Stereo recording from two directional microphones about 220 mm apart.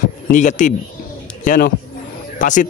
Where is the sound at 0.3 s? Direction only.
35° left (ahead or behind).